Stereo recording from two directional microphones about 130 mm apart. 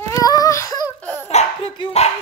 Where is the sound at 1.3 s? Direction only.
45° left (ahead or behind).